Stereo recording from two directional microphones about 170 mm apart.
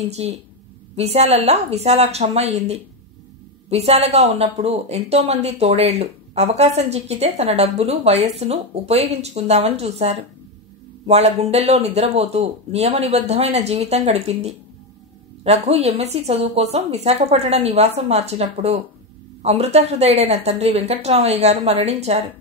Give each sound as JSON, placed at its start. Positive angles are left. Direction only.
{"t": 0.1, "sound": "speech", "side_deg": -40}